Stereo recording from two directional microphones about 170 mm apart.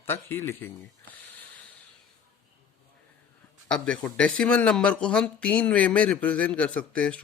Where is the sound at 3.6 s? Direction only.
5° left (ahead or behind).